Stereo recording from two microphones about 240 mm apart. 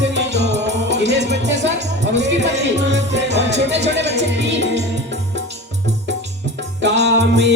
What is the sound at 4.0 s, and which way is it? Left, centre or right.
Music, right.